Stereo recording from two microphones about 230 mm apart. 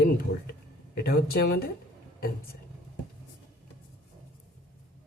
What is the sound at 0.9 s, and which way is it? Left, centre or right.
Speech, left.